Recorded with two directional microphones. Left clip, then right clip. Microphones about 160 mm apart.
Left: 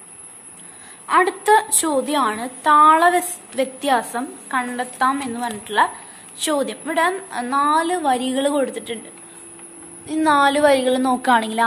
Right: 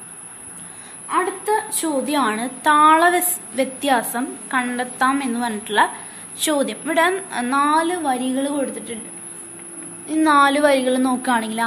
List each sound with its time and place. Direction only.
1.0 s a woman's voice: 45° left (ahead or behind)
2.1 s a woman's voice: 15° left (ahead or behind); by 8.9 s 45° left (ahead or behind)
10.0 s a woman's voice: 25° left (ahead or behind)